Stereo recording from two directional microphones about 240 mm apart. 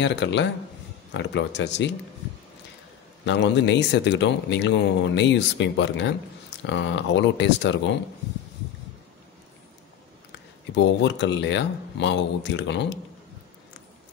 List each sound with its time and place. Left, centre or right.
0.0 s speech: left
3.3 s speech: left
10.7 s speech: left